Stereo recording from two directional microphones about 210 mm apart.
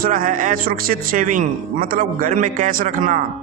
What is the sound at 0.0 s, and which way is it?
A man's voice, 40° right (ahead or behind).